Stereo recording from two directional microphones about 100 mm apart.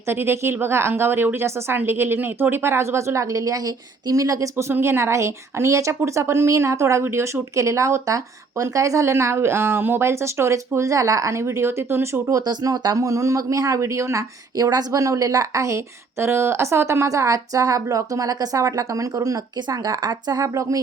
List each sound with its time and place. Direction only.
0.1 s a woman's voice: 25° right (ahead or behind)
4.5 s a woman's voice: 25° right (ahead or behind)
12.4 s speech: 40° right (ahead or behind)